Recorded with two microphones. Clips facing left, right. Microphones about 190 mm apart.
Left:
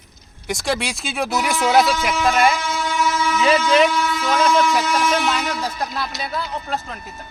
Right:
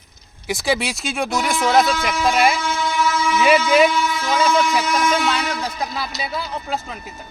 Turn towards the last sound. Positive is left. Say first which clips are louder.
# even
turn(degrees=0)  # may be behind; listen again after turning